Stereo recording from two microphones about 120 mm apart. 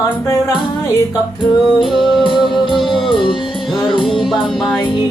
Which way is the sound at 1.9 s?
Centre (ahead or behind).